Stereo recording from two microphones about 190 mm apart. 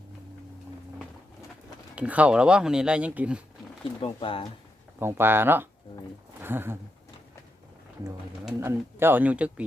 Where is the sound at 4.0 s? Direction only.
30° left (ahead or behind).